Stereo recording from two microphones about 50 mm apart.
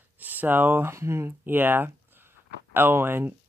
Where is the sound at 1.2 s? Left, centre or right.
Right.